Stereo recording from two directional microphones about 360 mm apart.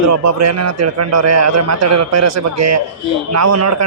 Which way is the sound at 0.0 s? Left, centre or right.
Right.